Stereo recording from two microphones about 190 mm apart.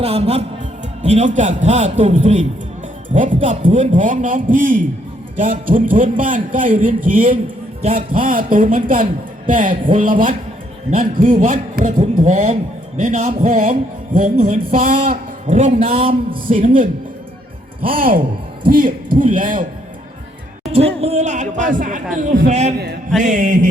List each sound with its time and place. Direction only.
0.0 s a man's voice: 30° right (ahead or behind)
3.6 s a man's voice: 30° right (ahead or behind)
3.9 s a man's voice: 45° right (ahead or behind)
7.8 s a man's voice: 30° right (ahead or behind)
8.1 s a man's voice: 45° right (ahead or behind); by 16.6 s 30° right (ahead or behind)
16.6 s a man's voice: 45° right (ahead or behind)
20.7 s a man's voice: 30° right (ahead or behind)